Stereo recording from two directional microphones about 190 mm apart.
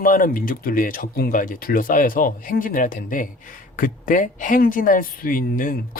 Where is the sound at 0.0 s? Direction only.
45° left (ahead or behind).